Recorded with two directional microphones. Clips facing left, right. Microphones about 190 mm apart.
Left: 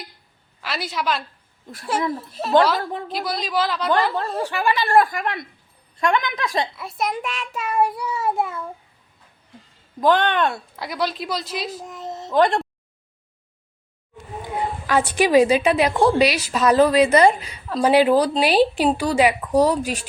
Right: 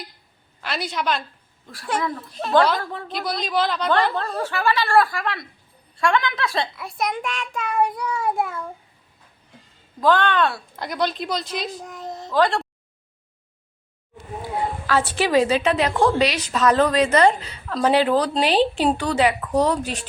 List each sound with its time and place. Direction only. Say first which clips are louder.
0.6 s a woman's voice: even; centre (ahead or behind)
1.6 s speech: left 2 dB; 20° left (ahead or behind)
3.1 s speech: right 3 dB; 5° left (ahead or behind)
4.4 s a woman's voice: even; 15° left (ahead or behind)
6.7 s speech: left 1 dB; centre (ahead or behind)
10.0 s speech: left 1 dB; 20° left (ahead or behind)
10.8 s speech: right 1 dB; 5° left (ahead or behind)
12.3 s speech: left 2 dB; 20° left (ahead or behind)
14.8 s a woman's voice: left 3 dB; 15° left (ahead or behind)